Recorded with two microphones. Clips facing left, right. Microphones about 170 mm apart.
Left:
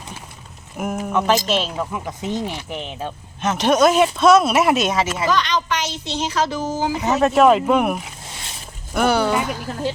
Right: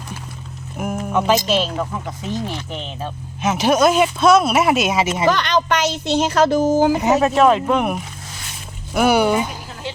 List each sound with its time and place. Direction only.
0.8 s speech: centre (ahead or behind)
2.2 s speech: 15° left (ahead or behind)
3.4 s speech: 5° right (ahead or behind)
5.3 s speech: 55° right (ahead or behind)
7.0 s speech: 5° right (ahead or behind)
8.9 s speech: 10° right (ahead or behind)